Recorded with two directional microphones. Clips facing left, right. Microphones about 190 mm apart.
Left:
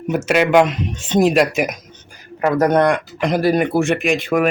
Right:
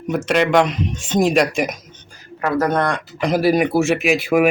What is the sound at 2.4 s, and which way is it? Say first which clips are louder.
Speech: left 4 dB; 15° left (ahead or behind).